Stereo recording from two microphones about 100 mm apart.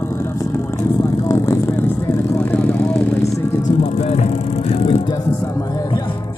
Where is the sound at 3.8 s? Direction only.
90° left.